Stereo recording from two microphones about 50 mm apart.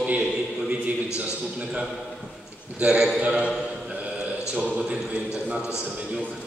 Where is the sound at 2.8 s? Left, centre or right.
Centre.